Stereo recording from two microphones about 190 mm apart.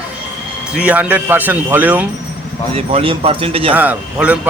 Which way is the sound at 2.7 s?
30° right (ahead or behind).